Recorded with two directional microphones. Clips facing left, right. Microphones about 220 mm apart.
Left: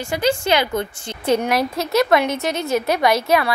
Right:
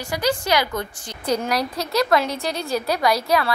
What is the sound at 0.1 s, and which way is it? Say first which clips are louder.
A woman's voice: left 3 dB; 25° left (ahead or behind).